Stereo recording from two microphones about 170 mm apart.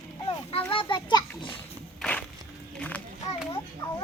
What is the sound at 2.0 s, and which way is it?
Walk, 10° left (ahead or behind).